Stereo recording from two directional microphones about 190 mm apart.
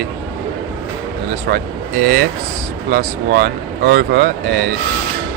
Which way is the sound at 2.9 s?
50° right (ahead or behind).